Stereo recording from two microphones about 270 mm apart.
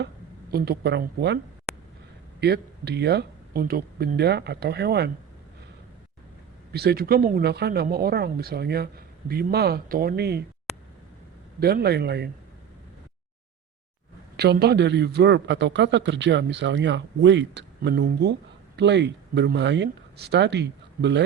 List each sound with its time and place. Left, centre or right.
0.5 s a man's voice: right
2.4 s a man's voice: right
6.7 s a man's voice: right
11.6 s a man's voice: right
14.3 s a man's voice: right